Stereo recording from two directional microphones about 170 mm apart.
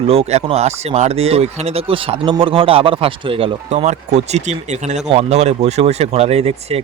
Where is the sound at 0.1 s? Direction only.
35° right (ahead or behind).